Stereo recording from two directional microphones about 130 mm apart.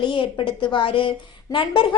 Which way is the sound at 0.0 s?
40° left (ahead or behind).